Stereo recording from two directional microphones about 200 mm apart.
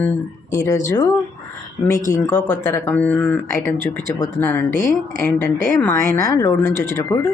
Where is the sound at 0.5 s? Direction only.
15° left (ahead or behind).